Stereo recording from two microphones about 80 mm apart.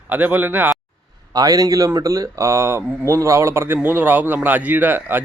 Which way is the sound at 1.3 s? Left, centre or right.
Right.